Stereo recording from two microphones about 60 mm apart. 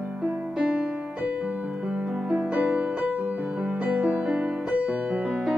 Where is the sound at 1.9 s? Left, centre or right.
Centre.